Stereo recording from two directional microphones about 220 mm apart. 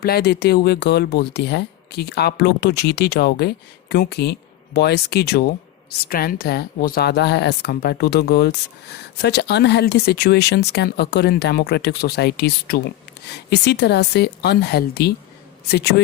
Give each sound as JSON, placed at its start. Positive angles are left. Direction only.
{"t": 0.0, "sound": "a woman's voice", "side_deg": 45}